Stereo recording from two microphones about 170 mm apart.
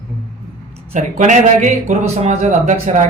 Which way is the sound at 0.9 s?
45° right (ahead or behind).